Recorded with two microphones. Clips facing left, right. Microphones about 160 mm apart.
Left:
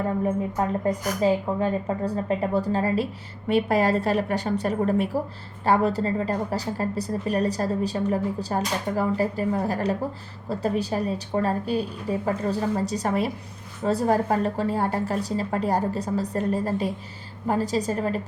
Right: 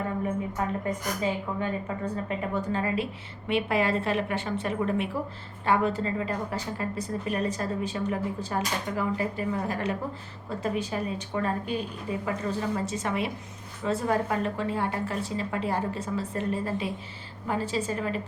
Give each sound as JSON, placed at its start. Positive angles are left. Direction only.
{"t": 0.5, "sound": "a woman's voice", "side_deg": 35}